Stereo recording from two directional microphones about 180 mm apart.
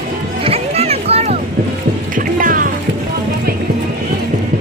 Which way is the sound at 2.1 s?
50° right (ahead or behind).